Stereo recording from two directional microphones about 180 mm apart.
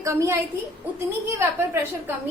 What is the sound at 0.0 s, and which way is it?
A woman's voice, 15° right (ahead or behind).